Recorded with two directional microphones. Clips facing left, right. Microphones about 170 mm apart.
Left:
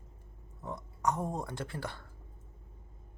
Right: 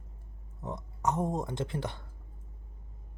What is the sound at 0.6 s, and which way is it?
Speech, 20° right (ahead or behind).